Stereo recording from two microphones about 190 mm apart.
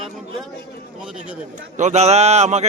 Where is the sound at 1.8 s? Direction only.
35° right (ahead or behind).